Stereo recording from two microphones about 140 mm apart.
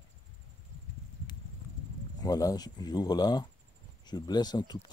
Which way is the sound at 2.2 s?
25° left (ahead or behind).